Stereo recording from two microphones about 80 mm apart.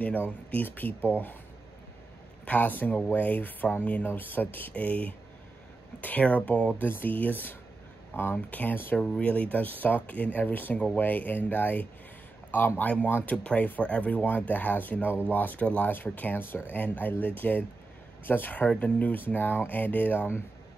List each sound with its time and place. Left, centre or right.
0.5 s speech: left
2.4 s speech: left
9.0 s speech: centre